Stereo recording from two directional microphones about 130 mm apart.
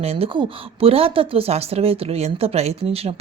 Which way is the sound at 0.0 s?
50° right (ahead or behind).